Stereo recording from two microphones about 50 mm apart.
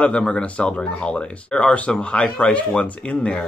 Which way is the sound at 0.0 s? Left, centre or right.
Centre.